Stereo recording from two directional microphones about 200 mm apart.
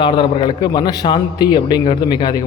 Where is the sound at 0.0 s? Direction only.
25° left (ahead or behind).